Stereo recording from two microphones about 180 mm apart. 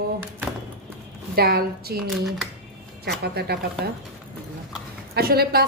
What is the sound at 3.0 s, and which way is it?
Speech, 65° right (ahead or behind).